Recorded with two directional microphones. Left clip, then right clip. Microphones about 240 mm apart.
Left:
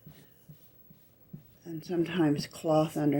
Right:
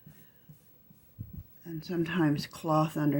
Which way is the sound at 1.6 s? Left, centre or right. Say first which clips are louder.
Left 2 dB; right.